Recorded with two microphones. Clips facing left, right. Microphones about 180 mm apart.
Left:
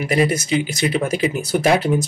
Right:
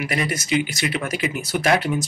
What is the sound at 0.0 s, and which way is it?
Speech, 30° left (ahead or behind).